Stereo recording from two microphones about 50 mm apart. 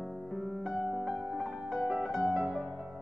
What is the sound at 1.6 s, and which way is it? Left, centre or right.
Music, centre.